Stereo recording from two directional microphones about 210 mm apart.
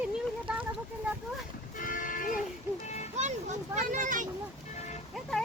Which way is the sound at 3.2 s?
35° right (ahead or behind).